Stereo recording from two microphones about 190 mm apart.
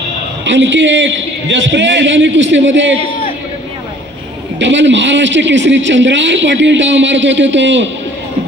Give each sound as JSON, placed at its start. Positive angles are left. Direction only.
{"t": 0.4, "sound": "a man's voice", "side_deg": -75}
{"t": 4.6, "sound": "a man's voice", "side_deg": -70}